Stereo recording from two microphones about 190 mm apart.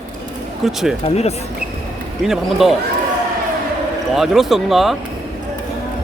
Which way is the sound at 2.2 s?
Centre (ahead or behind).